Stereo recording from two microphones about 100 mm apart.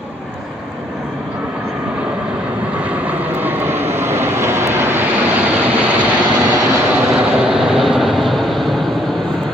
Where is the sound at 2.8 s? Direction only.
15° right (ahead or behind).